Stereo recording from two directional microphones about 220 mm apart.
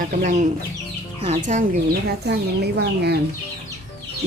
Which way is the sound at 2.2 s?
50° right (ahead or behind).